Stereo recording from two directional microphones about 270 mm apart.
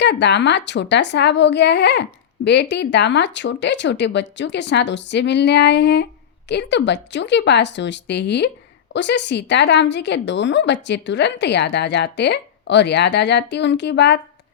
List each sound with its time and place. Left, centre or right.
0.0 s speech: left